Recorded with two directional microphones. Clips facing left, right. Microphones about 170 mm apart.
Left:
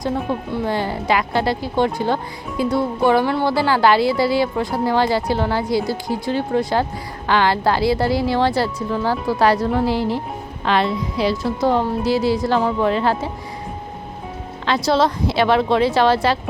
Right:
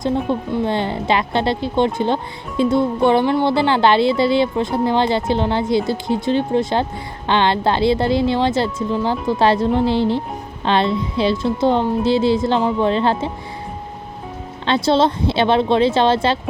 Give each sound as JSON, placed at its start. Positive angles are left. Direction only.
{"t": 0.3, "sound": "speech", "side_deg": -25}
{"t": 14.7, "sound": "speech", "side_deg": -25}